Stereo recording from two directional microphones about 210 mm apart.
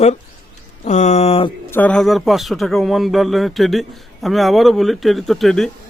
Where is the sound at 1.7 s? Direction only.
10° left (ahead or behind).